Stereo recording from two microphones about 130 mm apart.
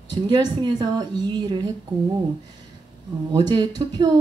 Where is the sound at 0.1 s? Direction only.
35° right (ahead or behind).